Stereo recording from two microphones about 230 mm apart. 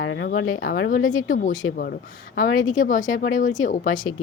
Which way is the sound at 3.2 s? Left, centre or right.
Left.